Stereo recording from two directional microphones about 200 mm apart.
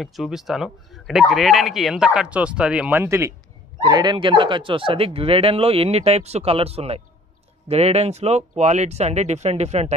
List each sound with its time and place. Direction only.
0.0 s speech: centre (ahead or behind); by 9.9 s 35° right (ahead or behind)